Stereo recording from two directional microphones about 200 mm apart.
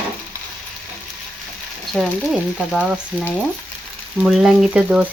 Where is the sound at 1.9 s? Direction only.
Centre (ahead or behind).